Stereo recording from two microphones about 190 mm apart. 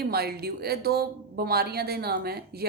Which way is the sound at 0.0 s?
55° right (ahead or behind).